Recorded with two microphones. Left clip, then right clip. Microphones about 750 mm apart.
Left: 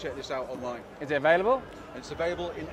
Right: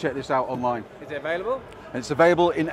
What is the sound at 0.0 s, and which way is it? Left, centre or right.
Speech, right.